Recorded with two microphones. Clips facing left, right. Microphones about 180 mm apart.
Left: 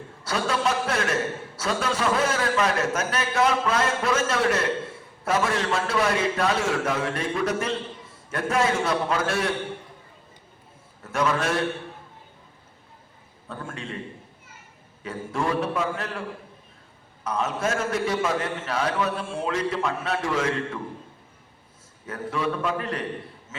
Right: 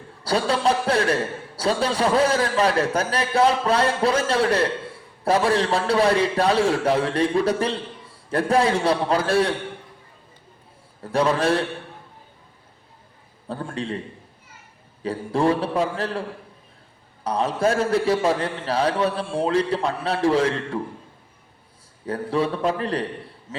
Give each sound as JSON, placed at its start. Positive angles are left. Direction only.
{"t": 0.3, "sound": "a man's voice", "side_deg": -35}
{"t": 11.0, "sound": "a man's voice", "side_deg": -30}
{"t": 13.5, "sound": "a man's voice", "side_deg": -35}
{"t": 15.0, "sound": "a man's voice", "side_deg": -30}
{"t": 17.2, "sound": "a man's voice", "side_deg": -35}
{"t": 22.0, "sound": "a man's voice", "side_deg": -30}
{"t": 23.5, "sound": "a sound", "side_deg": -35}